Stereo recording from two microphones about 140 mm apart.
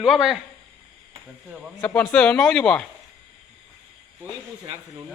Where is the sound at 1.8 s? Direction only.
10° left (ahead or behind).